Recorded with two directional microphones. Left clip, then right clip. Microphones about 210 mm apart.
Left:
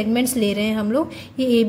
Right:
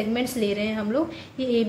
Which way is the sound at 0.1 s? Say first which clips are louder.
Left 6 dB; 35° left (ahead or behind).